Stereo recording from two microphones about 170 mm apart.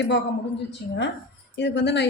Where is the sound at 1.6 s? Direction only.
90° left.